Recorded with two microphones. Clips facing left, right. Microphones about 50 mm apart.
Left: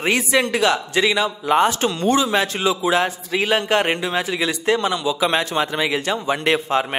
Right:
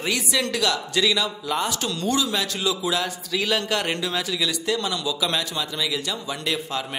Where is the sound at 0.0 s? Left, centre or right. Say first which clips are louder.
Left 6 dB; left.